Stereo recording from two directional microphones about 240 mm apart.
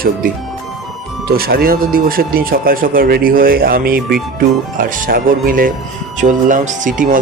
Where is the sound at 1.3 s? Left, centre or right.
Right.